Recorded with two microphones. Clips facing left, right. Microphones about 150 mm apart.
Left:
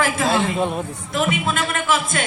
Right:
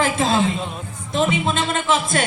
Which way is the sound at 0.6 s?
55° left (ahead or behind).